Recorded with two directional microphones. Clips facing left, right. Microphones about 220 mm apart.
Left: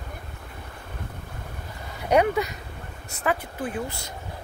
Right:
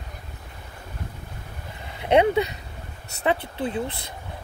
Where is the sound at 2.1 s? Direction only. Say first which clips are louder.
Right 2 dB; 25° right (ahead or behind).